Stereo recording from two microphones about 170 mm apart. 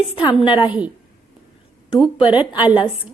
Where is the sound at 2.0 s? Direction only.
30° left (ahead or behind).